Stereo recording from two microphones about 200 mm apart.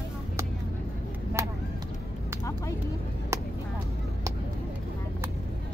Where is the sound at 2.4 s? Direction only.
15° left (ahead or behind).